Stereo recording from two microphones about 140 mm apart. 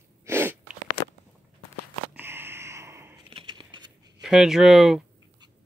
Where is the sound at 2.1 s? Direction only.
15° right (ahead or behind).